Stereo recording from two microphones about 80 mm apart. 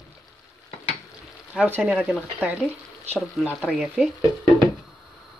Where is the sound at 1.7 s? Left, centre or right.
Centre.